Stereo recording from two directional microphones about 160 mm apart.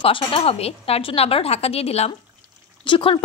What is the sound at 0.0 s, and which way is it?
Speech, 35° left (ahead or behind).